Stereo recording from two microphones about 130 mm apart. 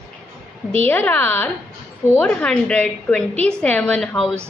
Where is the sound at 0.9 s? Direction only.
15° left (ahead or behind).